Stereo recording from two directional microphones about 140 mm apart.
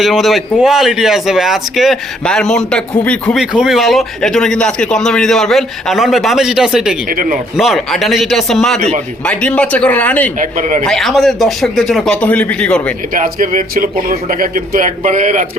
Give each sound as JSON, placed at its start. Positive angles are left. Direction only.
{"t": 0.0, "sound": "a man's voice", "side_deg": 0}
{"t": 3.3, "sound": "a man's voice", "side_deg": -5}
{"t": 7.1, "sound": "speech", "side_deg": -90}
{"t": 7.5, "sound": "a man's voice", "side_deg": 0}
{"t": 10.4, "sound": "speech", "side_deg": -65}
{"t": 10.8, "sound": "a man's voice", "side_deg": 0}
{"t": 13.1, "sound": "speech", "side_deg": -70}